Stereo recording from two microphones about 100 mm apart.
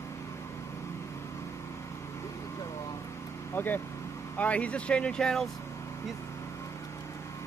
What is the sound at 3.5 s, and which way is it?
Speech, 20° left (ahead or behind).